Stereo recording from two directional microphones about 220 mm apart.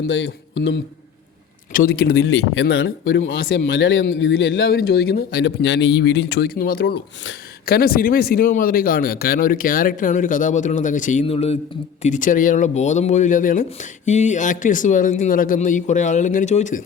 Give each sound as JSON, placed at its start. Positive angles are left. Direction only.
{"t": 0.1, "sound": "speech", "side_deg": 55}
{"t": 1.7, "sound": "speech", "side_deg": 40}
{"t": 2.2, "sound": "speech", "side_deg": 55}